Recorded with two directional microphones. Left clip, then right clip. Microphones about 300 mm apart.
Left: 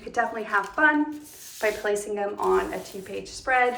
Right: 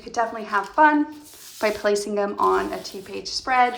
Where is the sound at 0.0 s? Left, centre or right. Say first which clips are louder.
Right 2 dB; centre.